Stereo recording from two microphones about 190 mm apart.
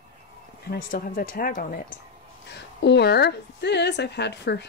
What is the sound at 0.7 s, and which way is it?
Speech, 50° left (ahead or behind).